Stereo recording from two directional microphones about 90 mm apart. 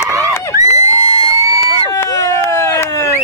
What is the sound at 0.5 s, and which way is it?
Crowd, 40° right (ahead or behind).